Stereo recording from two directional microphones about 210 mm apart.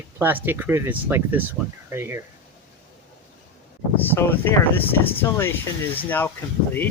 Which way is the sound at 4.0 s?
10° left (ahead or behind).